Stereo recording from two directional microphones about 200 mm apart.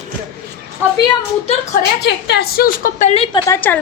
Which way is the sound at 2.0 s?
60° left (ahead or behind).